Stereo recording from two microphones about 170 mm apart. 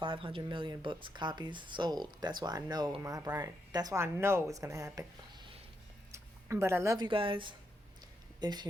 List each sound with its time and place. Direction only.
0.0 s speech: 30° right (ahead or behind)